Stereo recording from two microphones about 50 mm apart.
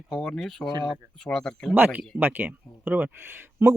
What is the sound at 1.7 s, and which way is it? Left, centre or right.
Speech, right.